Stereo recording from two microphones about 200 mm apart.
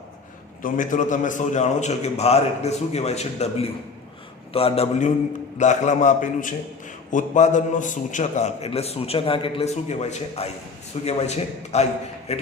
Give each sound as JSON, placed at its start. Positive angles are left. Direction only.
{"t": 0.6, "sound": "a man's voice", "side_deg": 40}